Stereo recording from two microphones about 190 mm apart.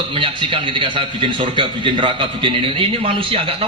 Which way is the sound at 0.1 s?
25° right (ahead or behind).